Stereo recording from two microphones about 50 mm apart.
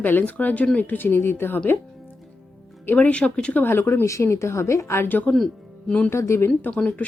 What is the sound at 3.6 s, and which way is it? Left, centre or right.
Speech, left.